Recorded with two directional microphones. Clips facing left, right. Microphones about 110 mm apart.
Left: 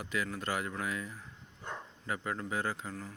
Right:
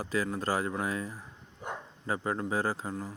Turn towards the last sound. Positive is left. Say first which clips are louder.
# right 5 dB
turn(degrees=-30)  # may be behind; listen again after turning